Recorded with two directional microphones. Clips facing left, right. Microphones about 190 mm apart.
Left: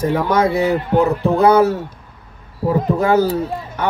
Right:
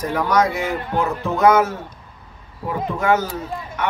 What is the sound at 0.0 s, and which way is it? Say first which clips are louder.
A man's voice: left 3 dB; 25° left (ahead or behind).